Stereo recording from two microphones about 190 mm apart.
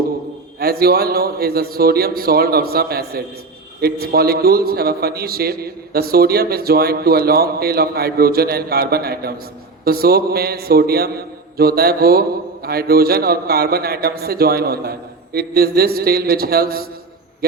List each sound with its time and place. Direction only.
0.6 s a man's voice: 55° right (ahead or behind)